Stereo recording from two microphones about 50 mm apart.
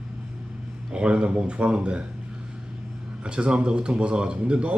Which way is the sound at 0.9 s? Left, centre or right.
Right.